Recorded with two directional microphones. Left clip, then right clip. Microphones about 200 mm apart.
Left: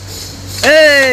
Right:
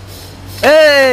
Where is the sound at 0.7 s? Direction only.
25° right (ahead or behind).